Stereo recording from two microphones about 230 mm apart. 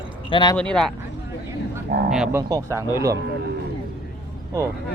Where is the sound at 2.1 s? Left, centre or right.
Centre.